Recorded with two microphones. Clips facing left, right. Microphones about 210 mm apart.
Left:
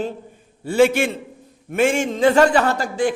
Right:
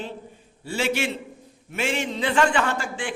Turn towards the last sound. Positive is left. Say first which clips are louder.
# left 8 dB
turn(degrees=40)  # may be behind; listen again after turning